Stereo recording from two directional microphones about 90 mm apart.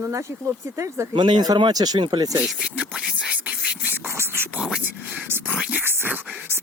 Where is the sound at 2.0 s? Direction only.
60° right (ahead or behind).